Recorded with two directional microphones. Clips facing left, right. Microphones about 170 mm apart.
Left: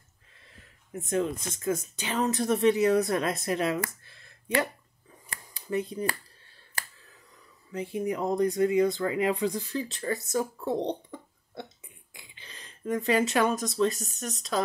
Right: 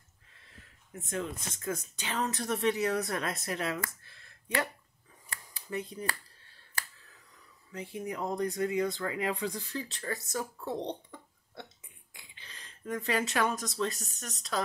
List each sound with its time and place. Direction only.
1.6 s speech: 15° left (ahead or behind)
5.3 s a sound: 20° left (ahead or behind)
7.7 s speech: 15° left (ahead or behind)